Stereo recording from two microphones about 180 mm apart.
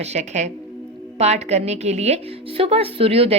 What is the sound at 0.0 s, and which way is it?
A woman's voice, 40° right (ahead or behind).